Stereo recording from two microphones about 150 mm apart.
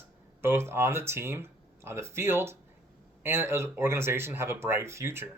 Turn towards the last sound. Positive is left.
turn(degrees=-15)  # may be behind; listen again after turning